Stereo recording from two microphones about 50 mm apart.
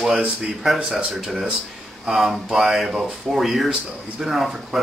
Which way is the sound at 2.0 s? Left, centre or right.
Centre.